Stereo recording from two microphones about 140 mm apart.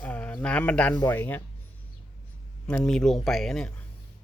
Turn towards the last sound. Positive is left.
turn(degrees=5)  # may be behind; listen again after turning